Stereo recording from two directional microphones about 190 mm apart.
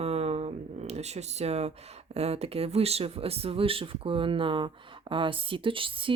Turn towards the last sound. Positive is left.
turn(degrees=-25)  # may be behind; listen again after turning